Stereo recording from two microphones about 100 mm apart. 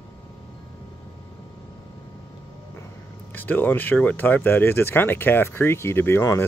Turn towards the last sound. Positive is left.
turn(degrees=25)  # may be behind; listen again after turning